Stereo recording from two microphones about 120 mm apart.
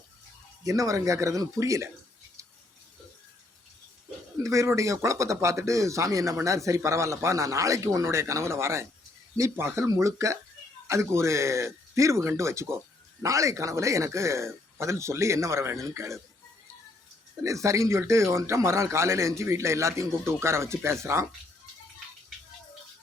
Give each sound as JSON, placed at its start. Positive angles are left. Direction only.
{"t": 0.6, "sound": "speech", "side_deg": -30}
{"t": 4.4, "sound": "speech", "side_deg": -25}
{"t": 17.4, "sound": "speech", "side_deg": -25}